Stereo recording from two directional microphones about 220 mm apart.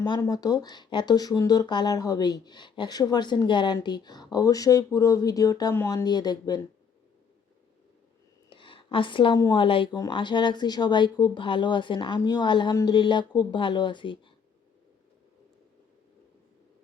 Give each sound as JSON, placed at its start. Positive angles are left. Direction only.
{"t": 0.0, "sound": "speech", "side_deg": 15}
{"t": 8.4, "sound": "a woman's voice", "side_deg": 25}